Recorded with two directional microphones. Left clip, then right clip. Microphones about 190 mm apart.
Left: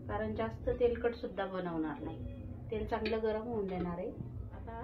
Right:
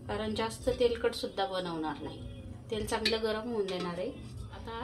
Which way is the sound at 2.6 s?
55° right (ahead or behind).